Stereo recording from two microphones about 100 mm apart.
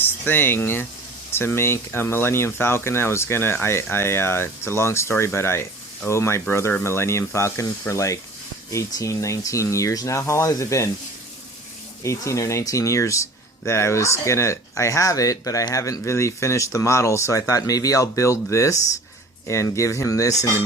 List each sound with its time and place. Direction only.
0.0 s speech: 20° left (ahead or behind)
12.0 s speech: 30° left (ahead or behind)